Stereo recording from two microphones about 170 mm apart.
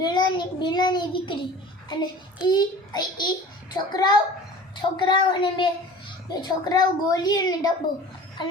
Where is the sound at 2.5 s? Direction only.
25° left (ahead or behind).